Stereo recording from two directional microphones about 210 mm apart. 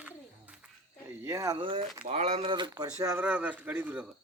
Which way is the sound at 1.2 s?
15° right (ahead or behind).